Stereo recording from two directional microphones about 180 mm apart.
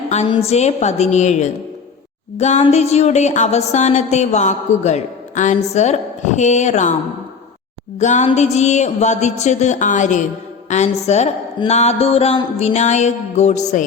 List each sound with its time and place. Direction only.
0.3 s speech: 35° left (ahead or behind)
7.9 s speech: 40° left (ahead or behind)